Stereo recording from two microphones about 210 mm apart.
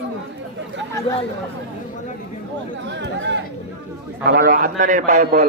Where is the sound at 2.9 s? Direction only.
55° right (ahead or behind).